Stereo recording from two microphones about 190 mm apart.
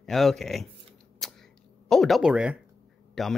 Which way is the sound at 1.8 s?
Centre (ahead or behind).